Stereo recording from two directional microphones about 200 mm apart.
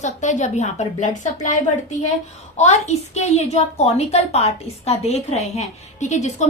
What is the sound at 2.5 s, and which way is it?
A woman's voice, 35° left (ahead or behind).